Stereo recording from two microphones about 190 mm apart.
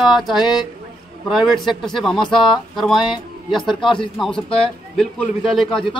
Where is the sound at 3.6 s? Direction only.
25° left (ahead or behind).